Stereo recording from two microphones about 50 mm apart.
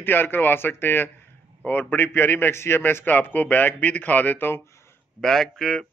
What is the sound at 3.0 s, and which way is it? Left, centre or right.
A man's voice, left.